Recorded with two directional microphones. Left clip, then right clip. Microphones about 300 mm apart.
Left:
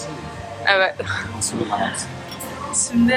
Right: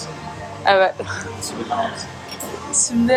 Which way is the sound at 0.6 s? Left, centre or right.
Centre.